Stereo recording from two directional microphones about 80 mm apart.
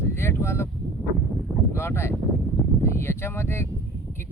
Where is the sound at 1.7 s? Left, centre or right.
Left.